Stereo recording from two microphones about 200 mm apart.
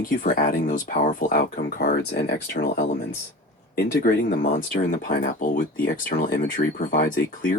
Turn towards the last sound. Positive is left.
turn(degrees=45)  # may be behind; listen again after turning